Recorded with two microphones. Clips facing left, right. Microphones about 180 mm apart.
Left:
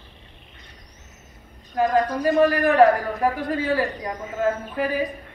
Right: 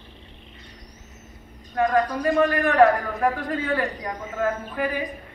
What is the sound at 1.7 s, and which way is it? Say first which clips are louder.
Speech: left 1 dB; 25° left (ahead or behind).